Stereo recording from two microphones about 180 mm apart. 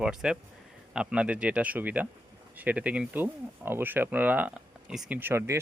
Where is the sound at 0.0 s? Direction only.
5° right (ahead or behind).